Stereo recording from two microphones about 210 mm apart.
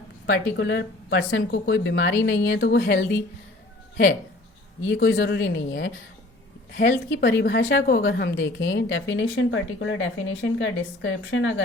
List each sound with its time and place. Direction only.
0.3 s speech: 55° left (ahead or behind)
4.9 s speech: 55° left (ahead or behind)